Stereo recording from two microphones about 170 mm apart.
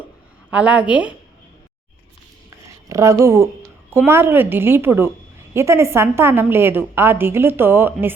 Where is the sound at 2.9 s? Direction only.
15° right (ahead or behind).